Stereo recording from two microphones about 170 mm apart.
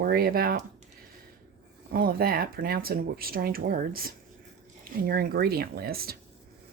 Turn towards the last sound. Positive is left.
turn(degrees=-65)  # may be behind; listen again after turning